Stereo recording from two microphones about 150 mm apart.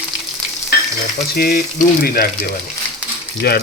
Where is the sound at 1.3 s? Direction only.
90° left.